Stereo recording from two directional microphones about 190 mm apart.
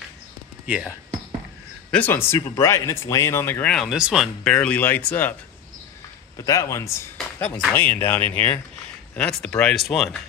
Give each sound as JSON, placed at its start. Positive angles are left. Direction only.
{"t": 0.7, "sound": "speech", "side_deg": -5}
{"t": 1.9, "sound": "speech", "side_deg": 10}
{"t": 3.7, "sound": "speech", "side_deg": -5}
{"t": 6.3, "sound": "speech", "side_deg": 15}